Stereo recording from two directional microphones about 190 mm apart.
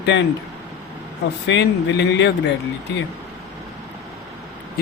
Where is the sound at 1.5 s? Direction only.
65° left (ahead or behind).